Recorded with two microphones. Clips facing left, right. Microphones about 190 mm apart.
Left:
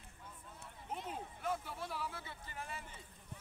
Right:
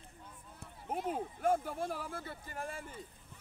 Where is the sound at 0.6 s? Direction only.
50° right (ahead or behind).